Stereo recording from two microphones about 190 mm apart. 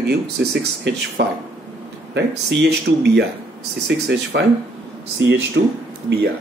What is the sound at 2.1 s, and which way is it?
Speech, 65° right (ahead or behind).